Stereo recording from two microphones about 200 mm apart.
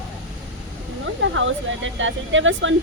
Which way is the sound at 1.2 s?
70° right (ahead or behind).